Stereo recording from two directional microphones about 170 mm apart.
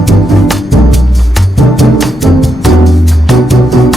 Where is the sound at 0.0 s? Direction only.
Centre (ahead or behind).